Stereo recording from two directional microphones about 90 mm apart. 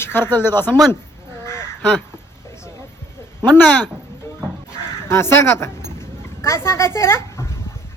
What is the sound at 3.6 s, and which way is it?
Speech, 15° left (ahead or behind).